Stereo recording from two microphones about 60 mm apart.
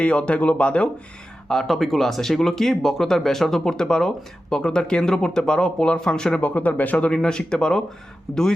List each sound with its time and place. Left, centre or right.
0.0 s speech: centre
1.5 s a man's voice: centre